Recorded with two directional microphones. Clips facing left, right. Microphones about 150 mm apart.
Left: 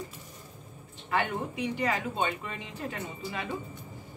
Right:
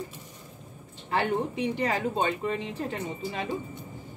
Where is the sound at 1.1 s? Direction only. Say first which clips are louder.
Right 3 dB; 30° right (ahead or behind).